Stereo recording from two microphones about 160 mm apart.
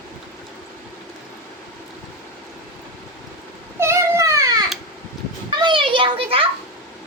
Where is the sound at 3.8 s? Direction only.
15° right (ahead or behind).